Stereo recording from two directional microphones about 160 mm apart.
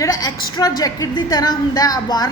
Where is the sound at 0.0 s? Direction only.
25° left (ahead or behind).